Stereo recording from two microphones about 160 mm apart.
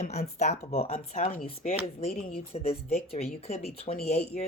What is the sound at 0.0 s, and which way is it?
Speech, 45° left (ahead or behind).